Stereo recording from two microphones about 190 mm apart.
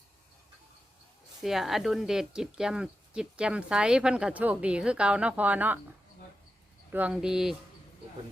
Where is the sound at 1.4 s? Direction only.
Centre (ahead or behind).